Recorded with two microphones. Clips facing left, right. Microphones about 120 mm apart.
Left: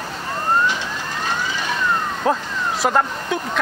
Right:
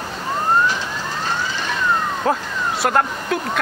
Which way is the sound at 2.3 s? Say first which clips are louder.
Left 2 dB; centre (ahead or behind).